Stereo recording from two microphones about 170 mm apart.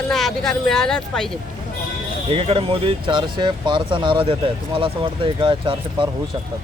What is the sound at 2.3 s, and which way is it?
Speech, 35° right (ahead or behind).